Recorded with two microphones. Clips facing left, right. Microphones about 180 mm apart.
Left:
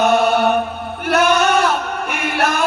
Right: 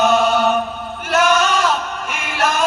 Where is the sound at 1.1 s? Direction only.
60° left (ahead or behind).